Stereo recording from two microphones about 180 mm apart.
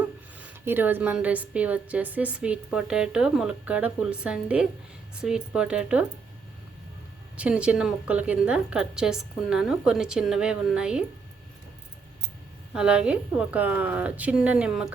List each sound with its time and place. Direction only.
0.3 s a woman's voice: 10° right (ahead or behind)
7.3 s a woman's voice: 5° right (ahead or behind)
12.7 s a woman's voice: 5° right (ahead or behind)